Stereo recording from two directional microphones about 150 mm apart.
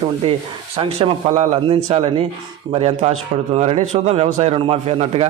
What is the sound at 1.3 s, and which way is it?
A man's voice, 45° right (ahead or behind).